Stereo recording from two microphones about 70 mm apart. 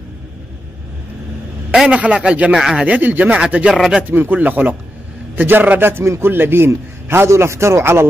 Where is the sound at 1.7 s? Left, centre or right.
Centre.